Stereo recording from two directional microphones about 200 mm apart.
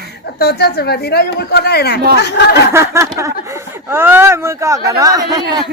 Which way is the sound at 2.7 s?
15° right (ahead or behind).